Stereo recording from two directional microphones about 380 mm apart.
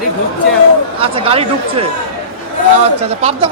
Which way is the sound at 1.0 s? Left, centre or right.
Centre.